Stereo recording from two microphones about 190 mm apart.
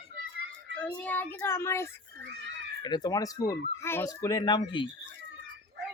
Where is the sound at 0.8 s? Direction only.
5° left (ahead or behind); by 4.9 s 25° left (ahead or behind).